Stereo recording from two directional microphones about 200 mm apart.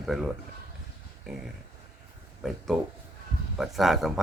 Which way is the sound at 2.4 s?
Centre (ahead or behind).